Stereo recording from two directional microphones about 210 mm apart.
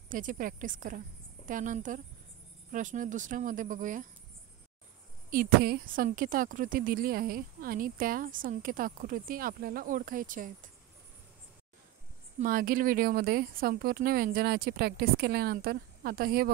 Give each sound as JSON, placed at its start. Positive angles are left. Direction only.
{"t": 0.1, "sound": "a woman's voice", "side_deg": -40}
{"t": 5.3, "sound": "speech", "side_deg": -45}
{"t": 12.4, "sound": "speech", "side_deg": -45}